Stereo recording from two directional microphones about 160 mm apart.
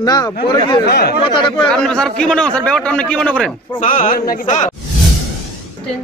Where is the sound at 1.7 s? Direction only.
5° left (ahead or behind).